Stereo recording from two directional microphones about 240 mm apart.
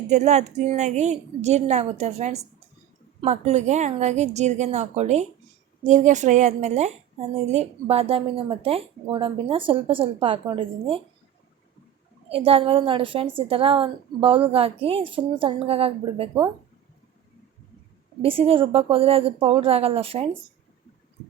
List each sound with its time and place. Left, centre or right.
0.1 s a woman's voice: right
12.3 s a woman's voice: right
18.2 s a woman's voice: right